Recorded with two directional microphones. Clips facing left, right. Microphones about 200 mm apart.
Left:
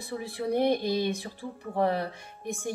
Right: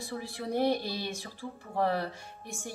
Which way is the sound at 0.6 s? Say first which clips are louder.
Left 3 dB; 15° left (ahead or behind).